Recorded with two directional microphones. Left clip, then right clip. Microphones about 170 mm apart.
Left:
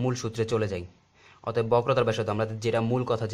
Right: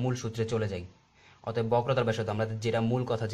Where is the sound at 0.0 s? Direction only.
25° left (ahead or behind).